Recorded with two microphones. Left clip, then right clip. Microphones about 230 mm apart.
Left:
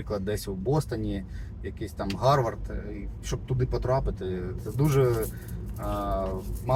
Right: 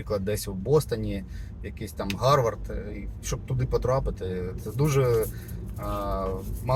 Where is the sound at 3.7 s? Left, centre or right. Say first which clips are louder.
Right 3 dB; centre.